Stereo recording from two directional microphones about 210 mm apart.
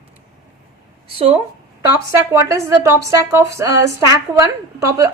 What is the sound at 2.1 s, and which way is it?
A woman's voice, 15° right (ahead or behind).